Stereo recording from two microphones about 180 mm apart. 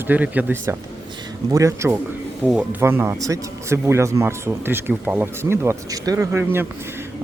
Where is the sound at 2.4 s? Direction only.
5° right (ahead or behind).